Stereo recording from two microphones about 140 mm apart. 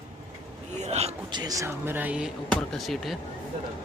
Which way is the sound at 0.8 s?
50° right (ahead or behind).